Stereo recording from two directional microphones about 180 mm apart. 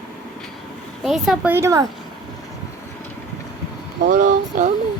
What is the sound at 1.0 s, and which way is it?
Speech, centre (ahead or behind).